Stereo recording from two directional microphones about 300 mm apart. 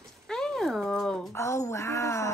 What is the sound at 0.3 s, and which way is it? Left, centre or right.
Cat, centre.